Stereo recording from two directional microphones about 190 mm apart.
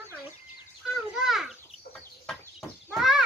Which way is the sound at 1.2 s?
Centre (ahead or behind).